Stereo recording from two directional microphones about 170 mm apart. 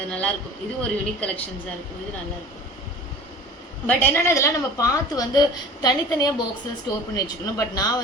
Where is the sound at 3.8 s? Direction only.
10° left (ahead or behind).